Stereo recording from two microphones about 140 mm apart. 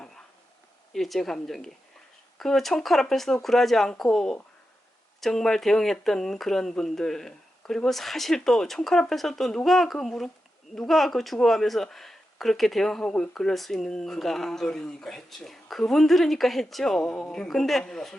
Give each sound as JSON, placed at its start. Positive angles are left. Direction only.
{"t": 0.9, "sound": "speech", "side_deg": 0}